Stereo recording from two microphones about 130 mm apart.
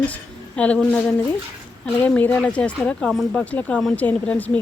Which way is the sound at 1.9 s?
15° left (ahead or behind).